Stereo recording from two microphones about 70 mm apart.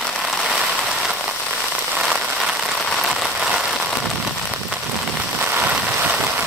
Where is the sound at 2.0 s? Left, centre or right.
Centre.